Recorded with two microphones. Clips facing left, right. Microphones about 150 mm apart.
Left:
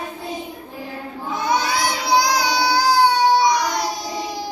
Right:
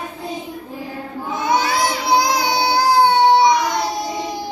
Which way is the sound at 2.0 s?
25° right (ahead or behind).